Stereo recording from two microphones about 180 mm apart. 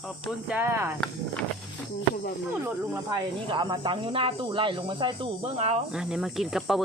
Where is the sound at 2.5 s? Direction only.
10° right (ahead or behind); by 5.8 s 35° right (ahead or behind).